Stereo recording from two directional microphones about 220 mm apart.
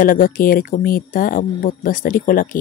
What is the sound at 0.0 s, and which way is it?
Speech, 40° left (ahead or behind).